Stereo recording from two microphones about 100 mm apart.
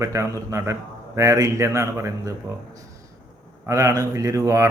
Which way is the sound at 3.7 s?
30° right (ahead or behind).